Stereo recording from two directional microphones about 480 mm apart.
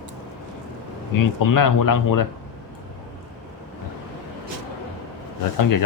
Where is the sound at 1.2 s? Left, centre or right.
Left.